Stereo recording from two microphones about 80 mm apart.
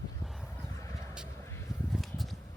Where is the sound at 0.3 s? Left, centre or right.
Centre.